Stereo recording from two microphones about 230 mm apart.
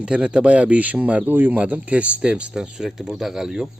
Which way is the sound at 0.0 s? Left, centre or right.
Centre.